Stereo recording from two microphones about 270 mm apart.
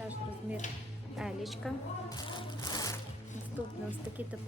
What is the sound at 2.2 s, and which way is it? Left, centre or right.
Music, centre.